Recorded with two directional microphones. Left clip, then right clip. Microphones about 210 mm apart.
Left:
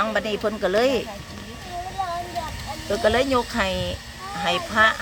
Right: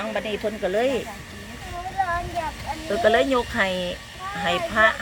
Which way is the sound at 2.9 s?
5° left (ahead or behind).